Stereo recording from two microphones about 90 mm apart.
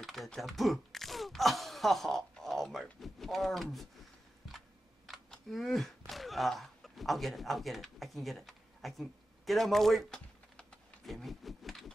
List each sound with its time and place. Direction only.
0.0 s speech: centre (ahead or behind)
4.5 s computer keyboard: centre (ahead or behind)